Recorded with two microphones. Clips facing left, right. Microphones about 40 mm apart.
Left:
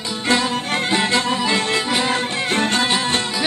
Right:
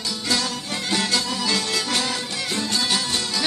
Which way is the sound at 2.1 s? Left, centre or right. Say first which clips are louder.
Left 7 dB; left.